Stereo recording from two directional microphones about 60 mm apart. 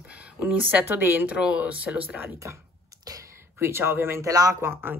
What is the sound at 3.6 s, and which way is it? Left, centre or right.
Speech, right.